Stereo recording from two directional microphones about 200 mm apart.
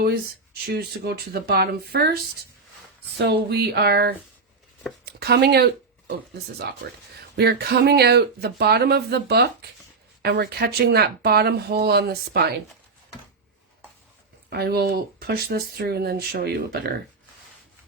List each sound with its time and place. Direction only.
0.6 s speech: 50° right (ahead or behind)
3.2 s speech: 55° right (ahead or behind)
14.5 s speech: 50° right (ahead or behind)